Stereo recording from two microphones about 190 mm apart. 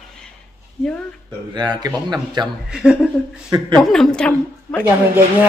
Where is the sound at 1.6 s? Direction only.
20° right (ahead or behind).